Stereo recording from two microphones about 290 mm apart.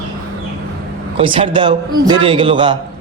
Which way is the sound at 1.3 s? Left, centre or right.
Centre.